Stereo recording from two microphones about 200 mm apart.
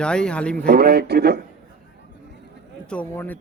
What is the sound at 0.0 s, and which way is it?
Speech, 5° left (ahead or behind).